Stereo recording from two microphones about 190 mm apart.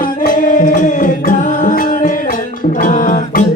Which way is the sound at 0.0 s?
45° left (ahead or behind).